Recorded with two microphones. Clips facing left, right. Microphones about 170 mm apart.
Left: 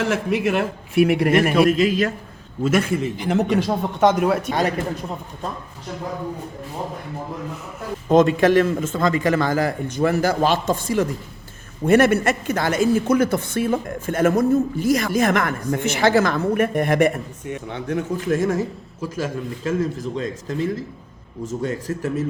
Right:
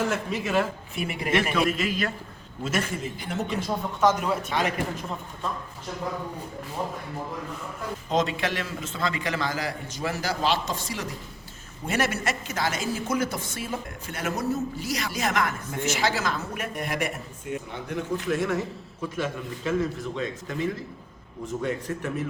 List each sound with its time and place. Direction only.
0.0 s a man's voice: 75° left (ahead or behind)
1.3 s speech: 55° left (ahead or behind)
1.8 s a man's voice: 40° left (ahead or behind)
2.6 s speech: 55° left (ahead or behind)
3.2 s a man's voice: 80° left; by 4.7 s 45° left (ahead or behind)
8.1 s a man's voice: 50° left (ahead or behind)
17.7 s a man's voice: 65° left (ahead or behind)
18.3 s a man's voice: 45° left (ahead or behind)